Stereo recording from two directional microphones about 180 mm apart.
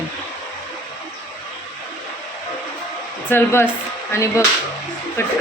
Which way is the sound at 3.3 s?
15° left (ahead or behind).